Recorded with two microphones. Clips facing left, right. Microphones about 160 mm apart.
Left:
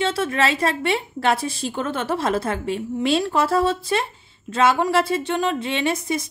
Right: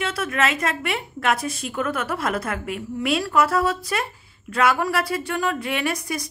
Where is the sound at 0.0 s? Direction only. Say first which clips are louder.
Left 3 dB; 30° left (ahead or behind).